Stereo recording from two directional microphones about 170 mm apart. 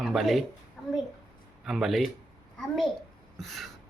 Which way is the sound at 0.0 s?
Centre (ahead or behind).